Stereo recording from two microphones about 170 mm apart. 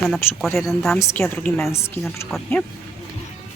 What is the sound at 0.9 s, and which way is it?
Speech, 15° left (ahead or behind).